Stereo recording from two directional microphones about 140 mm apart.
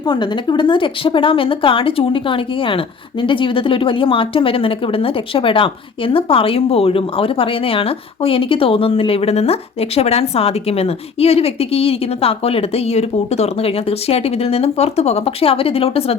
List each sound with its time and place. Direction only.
0.1 s speech: 30° left (ahead or behind)